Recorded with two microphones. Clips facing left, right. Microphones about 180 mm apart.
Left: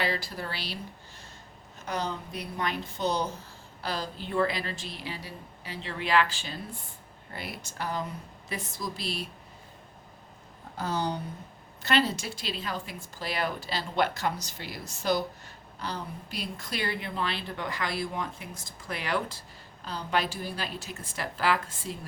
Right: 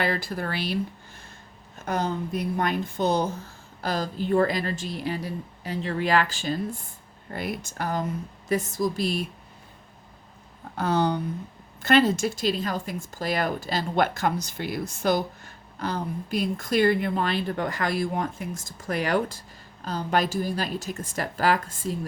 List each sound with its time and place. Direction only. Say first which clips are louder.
0.0 s speech: right 5 dB; 50° right (ahead or behind)
1.8 s speech: right 6 dB; 50° right (ahead or behind)
10.8 s speech: right 7 dB; 65° right (ahead or behind)
11.8 s speech: right 7 dB; 50° right (ahead or behind)